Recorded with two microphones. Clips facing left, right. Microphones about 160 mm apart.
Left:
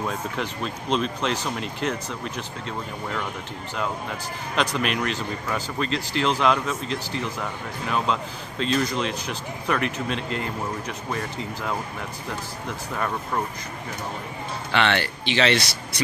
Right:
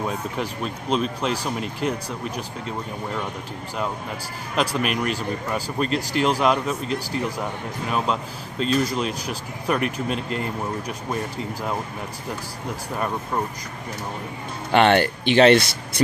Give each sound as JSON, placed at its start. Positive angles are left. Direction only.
{"t": 0.0, "sound": "speech", "side_deg": -5}
{"t": 4.6, "sound": "speech", "side_deg": -5}
{"t": 5.9, "sound": "speech", "side_deg": -50}
{"t": 6.4, "sound": "speech", "side_deg": -10}
{"t": 14.7, "sound": "speech", "side_deg": -45}